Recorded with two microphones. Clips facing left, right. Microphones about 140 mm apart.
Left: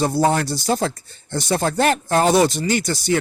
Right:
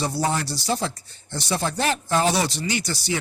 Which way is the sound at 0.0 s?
50° left (ahead or behind).